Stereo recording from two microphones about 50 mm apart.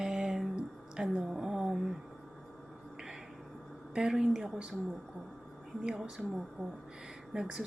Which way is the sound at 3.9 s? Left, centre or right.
Centre.